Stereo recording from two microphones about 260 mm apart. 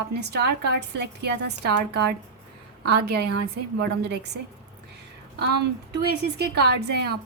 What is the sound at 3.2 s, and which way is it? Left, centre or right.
Speech, right.